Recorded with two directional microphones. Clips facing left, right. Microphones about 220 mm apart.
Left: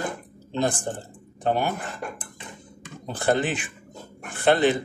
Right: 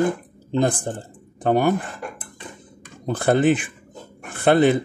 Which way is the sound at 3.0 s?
55° right (ahead or behind).